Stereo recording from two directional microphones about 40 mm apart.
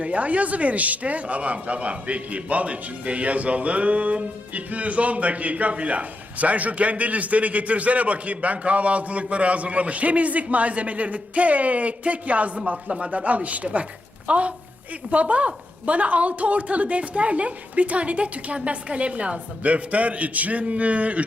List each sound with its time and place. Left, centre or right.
0.0 s speech: right